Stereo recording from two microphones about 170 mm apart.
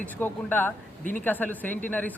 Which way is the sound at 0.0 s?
10° left (ahead or behind).